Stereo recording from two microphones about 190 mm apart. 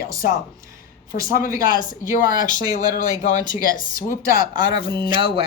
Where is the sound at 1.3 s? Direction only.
45° left (ahead or behind).